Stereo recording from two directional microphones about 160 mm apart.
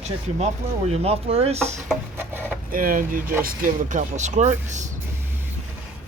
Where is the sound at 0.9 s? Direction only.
40° right (ahead or behind).